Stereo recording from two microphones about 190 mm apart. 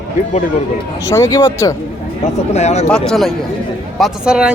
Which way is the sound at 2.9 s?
Centre (ahead or behind).